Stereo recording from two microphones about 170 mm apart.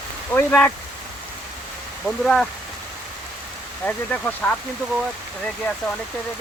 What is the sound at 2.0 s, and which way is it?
Speech, 5° left (ahead or behind).